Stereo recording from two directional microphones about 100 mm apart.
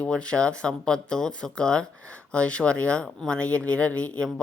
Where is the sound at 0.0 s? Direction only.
10° left (ahead or behind).